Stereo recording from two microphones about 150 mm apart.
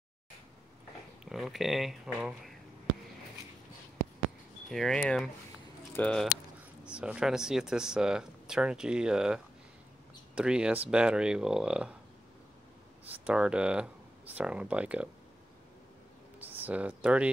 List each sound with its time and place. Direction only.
1.2 s speech: 5° right (ahead or behind)
4.6 s speech: centre (ahead or behind)
6.8 s speech: 5° right (ahead or behind)
13.2 s speech: 5° right (ahead or behind)
16.3 s a sound: 10° right (ahead or behind)